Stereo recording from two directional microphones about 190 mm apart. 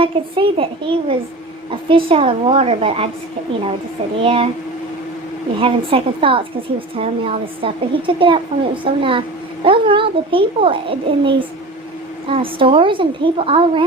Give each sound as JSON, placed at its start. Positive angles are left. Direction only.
{"t": 0.0, "sound": "a woman's voice", "side_deg": -30}
{"t": 4.2, "sound": "a woman's voice", "side_deg": -30}
{"t": 5.5, "sound": "a woman's voice", "side_deg": -30}